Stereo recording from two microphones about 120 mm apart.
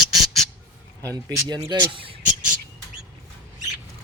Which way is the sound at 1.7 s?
45° right (ahead or behind).